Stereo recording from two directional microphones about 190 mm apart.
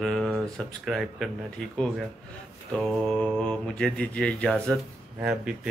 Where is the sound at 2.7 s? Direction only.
Centre (ahead or behind).